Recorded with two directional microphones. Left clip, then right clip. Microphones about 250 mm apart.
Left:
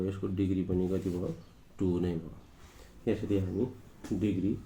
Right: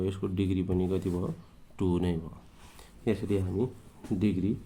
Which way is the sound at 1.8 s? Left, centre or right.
Right.